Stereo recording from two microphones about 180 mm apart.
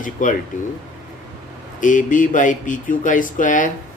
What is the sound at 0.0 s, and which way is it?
Speech, 45° left (ahead or behind).